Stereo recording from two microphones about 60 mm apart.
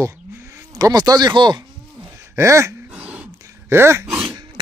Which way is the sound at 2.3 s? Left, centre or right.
Right.